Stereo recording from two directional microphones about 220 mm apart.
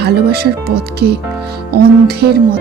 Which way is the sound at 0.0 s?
45° right (ahead or behind).